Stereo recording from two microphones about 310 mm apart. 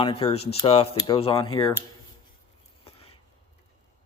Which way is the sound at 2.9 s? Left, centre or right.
Centre.